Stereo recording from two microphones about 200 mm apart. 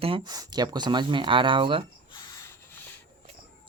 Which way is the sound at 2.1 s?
15° left (ahead or behind).